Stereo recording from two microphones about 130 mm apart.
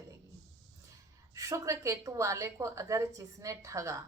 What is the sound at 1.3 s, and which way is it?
A woman's voice, 25° right (ahead or behind).